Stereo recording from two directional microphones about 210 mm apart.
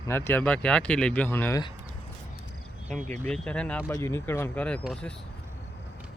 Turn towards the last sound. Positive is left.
turn(degrees=5)  # may be behind; listen again after turning